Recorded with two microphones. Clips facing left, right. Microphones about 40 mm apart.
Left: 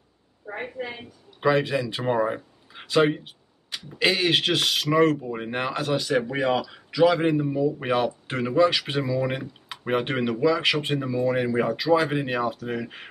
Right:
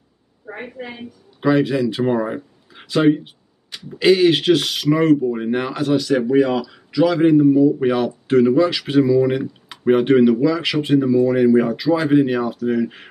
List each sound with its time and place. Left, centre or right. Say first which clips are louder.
0.5 s speech: right 1 dB; centre